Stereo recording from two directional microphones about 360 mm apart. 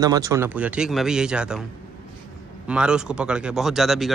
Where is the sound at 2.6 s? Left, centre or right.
Centre.